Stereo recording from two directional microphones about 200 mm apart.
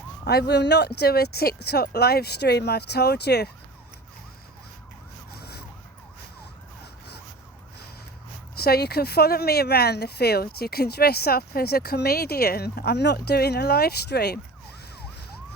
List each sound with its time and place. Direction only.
0.3 s speech: 55° left (ahead or behind)
5.3 s emergency vehicle: 50° left (ahead or behind)
8.5 s speech: 50° left (ahead or behind)